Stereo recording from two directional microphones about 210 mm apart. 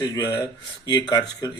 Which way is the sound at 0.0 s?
15° left (ahead or behind).